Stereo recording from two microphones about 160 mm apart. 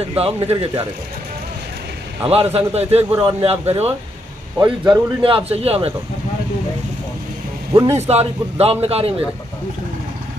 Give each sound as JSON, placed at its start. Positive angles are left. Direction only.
{"t": 0.2, "sound": "a man's voice", "side_deg": -35}
{"t": 2.2, "sound": "a man's voice", "side_deg": -40}
{"t": 7.7, "sound": "speech", "side_deg": -25}
{"t": 8.1, "sound": "a man's voice", "side_deg": -40}